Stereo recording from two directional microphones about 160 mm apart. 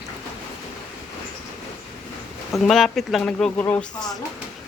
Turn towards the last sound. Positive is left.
turn(degrees=25)  # may be behind; listen again after turning